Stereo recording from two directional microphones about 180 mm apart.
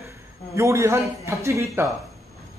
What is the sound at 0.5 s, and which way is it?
A woman's voice, 15° right (ahead or behind).